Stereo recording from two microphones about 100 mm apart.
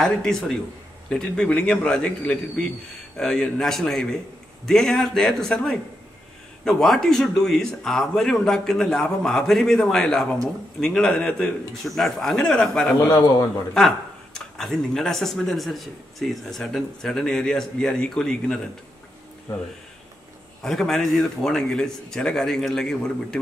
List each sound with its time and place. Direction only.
0.0 s a man's voice: 5° left (ahead or behind)
13.1 s a man's voice: 30° left (ahead or behind)
13.7 s speech: 5° left (ahead or behind)
20.6 s speech: 5° left (ahead or behind)